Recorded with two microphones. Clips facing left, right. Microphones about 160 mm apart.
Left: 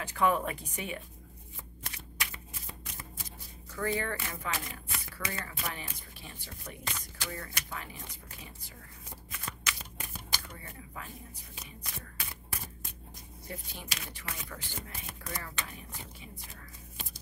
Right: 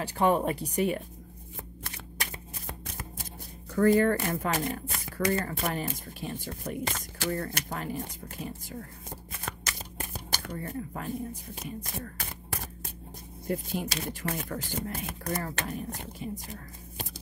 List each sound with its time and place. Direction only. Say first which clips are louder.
0.0 s speech: right 4 dB; 35° right (ahead or behind)
3.7 s speech: right 11 dB; 45° right (ahead or behind)
10.7 s speech: right 12 dB; 45° right (ahead or behind)
13.5 s speech: right 12 dB; 45° right (ahead or behind)